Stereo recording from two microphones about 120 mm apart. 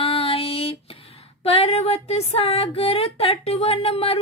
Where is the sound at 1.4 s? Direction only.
55° left (ahead or behind).